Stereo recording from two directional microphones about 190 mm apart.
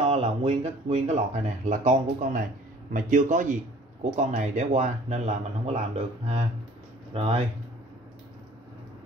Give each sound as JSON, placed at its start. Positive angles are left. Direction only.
{"t": 0.1, "sound": "speech", "side_deg": -30}